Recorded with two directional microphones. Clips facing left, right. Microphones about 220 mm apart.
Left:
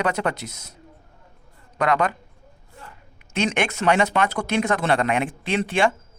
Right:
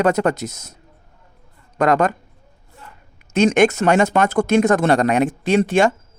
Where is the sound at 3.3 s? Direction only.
45° right (ahead or behind).